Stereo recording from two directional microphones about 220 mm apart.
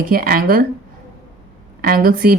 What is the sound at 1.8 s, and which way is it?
Speech, 40° right (ahead or behind).